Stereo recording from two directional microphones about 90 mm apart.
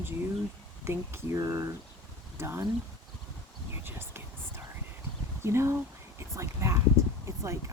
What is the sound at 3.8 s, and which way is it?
Whispering, 25° right (ahead or behind).